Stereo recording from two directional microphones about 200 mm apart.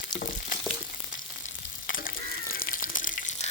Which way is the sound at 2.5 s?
45° left (ahead or behind).